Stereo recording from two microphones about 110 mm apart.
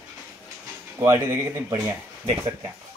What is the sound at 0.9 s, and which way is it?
Speech, 30° right (ahead or behind).